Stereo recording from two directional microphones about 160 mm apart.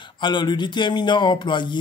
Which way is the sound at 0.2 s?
30° left (ahead or behind).